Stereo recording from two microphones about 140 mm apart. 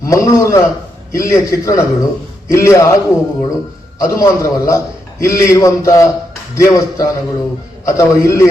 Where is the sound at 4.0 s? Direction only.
25° left (ahead or behind).